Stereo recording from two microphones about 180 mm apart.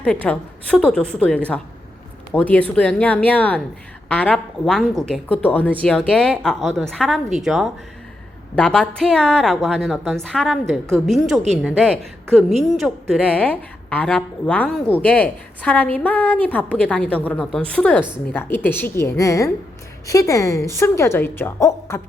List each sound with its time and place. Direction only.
0.0 s a woman's voice: 5° left (ahead or behind)